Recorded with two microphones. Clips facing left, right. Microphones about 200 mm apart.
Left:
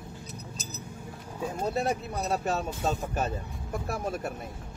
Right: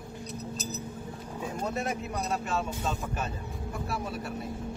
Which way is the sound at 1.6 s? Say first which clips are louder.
Left 4 dB; 35° left (ahead or behind).